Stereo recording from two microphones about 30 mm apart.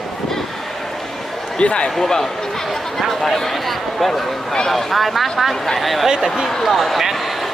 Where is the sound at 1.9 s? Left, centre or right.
Centre.